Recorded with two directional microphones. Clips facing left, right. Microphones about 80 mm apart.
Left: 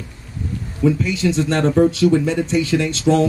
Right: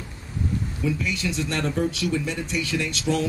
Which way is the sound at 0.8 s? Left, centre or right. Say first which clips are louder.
Left 10 dB; left.